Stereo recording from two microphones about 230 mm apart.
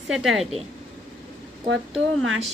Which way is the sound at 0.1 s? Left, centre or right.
Centre.